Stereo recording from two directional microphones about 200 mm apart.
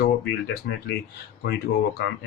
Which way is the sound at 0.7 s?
55° left (ahead or behind).